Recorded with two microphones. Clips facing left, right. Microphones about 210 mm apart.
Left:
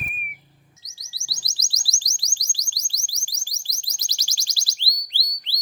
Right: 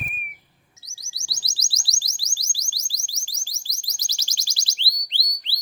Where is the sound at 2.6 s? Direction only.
10° right (ahead or behind).